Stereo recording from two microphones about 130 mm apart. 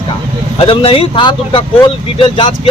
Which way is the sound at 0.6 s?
45° left (ahead or behind).